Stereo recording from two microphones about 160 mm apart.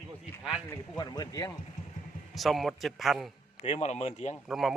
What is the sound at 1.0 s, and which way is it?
Speech, 25° left (ahead or behind).